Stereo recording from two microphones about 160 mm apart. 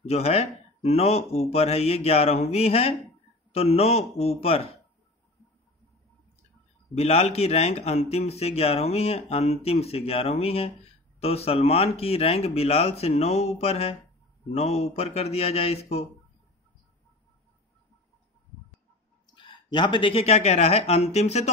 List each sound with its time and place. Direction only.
0.0 s speech: 40° left (ahead or behind)
7.0 s speech: 40° left (ahead or behind)
19.3 s speech: 30° left (ahead or behind)